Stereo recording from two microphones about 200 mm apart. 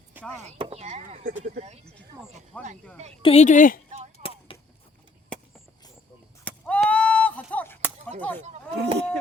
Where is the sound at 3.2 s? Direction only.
35° left (ahead or behind).